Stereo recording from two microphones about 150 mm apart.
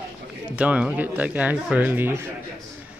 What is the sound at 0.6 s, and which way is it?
Speech, 10° right (ahead or behind).